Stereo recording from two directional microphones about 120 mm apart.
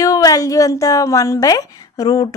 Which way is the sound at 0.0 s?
30° left (ahead or behind).